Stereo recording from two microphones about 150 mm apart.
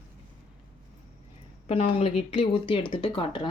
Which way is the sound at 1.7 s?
45° left (ahead or behind).